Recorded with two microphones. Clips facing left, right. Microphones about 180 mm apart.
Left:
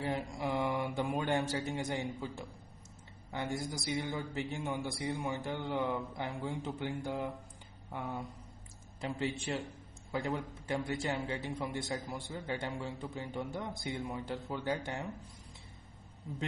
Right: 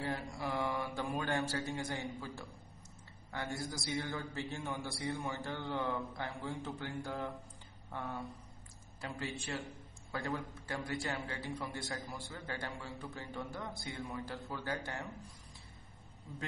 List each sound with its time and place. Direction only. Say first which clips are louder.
0.3 s a man's voice: left 3 dB; 20° left (ahead or behind)